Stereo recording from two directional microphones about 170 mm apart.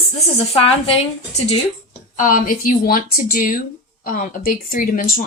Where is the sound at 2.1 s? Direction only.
50° left (ahead or behind).